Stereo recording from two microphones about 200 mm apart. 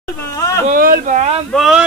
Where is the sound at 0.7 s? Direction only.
45° right (ahead or behind).